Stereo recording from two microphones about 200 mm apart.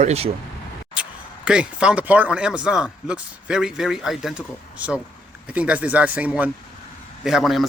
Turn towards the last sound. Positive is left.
turn(degrees=0)  # may be behind; listen again after turning